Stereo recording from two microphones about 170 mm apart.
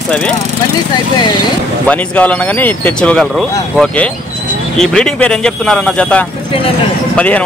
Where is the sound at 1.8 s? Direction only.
10° left (ahead or behind).